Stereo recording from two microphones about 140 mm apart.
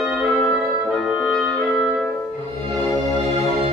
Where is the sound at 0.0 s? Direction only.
Centre (ahead or behind).